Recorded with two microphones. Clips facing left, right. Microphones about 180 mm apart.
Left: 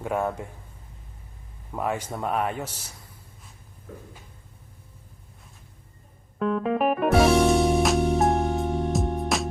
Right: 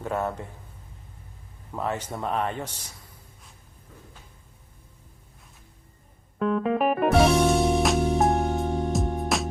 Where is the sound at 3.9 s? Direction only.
60° left (ahead or behind).